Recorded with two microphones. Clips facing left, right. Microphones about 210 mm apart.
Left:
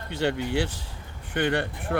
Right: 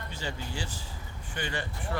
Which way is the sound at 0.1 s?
65° left (ahead or behind).